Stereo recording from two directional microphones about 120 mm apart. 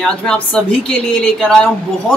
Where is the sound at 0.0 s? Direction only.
5° left (ahead or behind).